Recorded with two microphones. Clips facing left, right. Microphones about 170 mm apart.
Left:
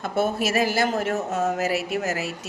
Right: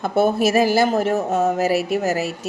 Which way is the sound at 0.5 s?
35° right (ahead or behind).